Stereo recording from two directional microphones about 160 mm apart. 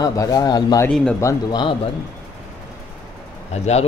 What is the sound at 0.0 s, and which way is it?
Speech, 20° left (ahead or behind).